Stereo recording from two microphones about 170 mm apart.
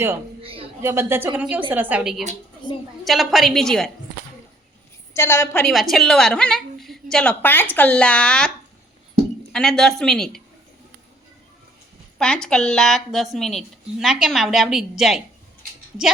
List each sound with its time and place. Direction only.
0.4 s a sound: 35° right (ahead or behind)
0.8 s a woman's voice: 15° right (ahead or behind); by 3.9 s 5° left (ahead or behind)
5.1 s a woman's voice: 15° left (ahead or behind)
5.6 s a woman's voice: centre (ahead or behind)
12.2 s a woman's voice: 5° left (ahead or behind)